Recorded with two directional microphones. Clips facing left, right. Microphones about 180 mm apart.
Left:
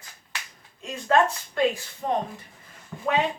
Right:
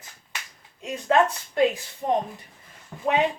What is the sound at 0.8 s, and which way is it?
Speech, 20° right (ahead or behind).